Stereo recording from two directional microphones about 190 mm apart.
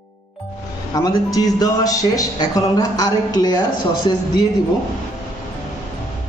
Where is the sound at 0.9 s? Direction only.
20° left (ahead or behind).